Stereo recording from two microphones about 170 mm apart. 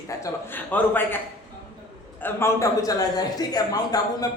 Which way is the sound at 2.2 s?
15° left (ahead or behind).